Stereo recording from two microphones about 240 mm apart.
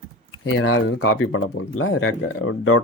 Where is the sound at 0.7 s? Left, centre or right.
Left.